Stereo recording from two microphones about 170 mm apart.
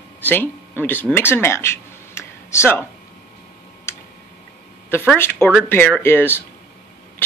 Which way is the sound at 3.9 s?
15° left (ahead or behind).